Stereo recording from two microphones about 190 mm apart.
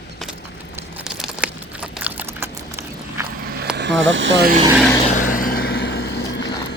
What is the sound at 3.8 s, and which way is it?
Speech, 75° right (ahead or behind).